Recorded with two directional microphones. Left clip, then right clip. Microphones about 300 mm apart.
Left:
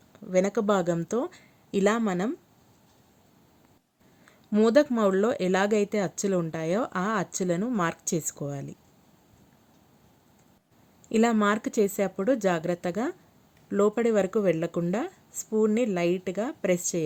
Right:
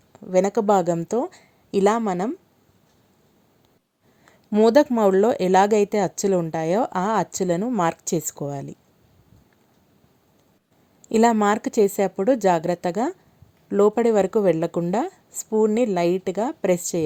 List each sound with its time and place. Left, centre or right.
0.1 s speech: centre
4.3 s speech: centre
11.1 s speech: centre